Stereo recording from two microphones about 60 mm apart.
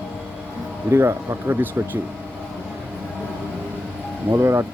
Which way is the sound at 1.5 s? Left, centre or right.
Right.